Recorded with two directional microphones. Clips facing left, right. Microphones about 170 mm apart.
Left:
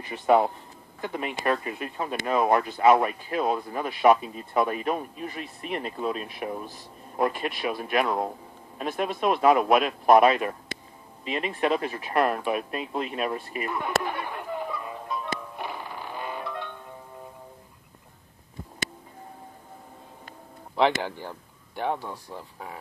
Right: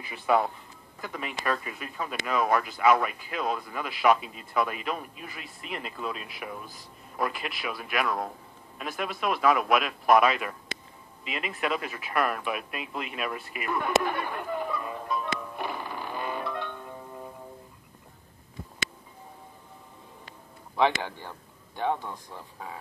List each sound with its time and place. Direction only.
0.0 s speech: 35° left (ahead or behind)
13.7 s music: 20° left (ahead or behind)
21.0 s speech: 10° left (ahead or behind)